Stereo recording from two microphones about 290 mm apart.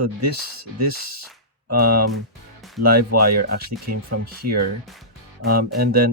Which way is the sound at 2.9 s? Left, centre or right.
Right.